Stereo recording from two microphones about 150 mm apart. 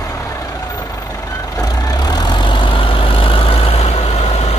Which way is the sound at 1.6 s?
25° left (ahead or behind).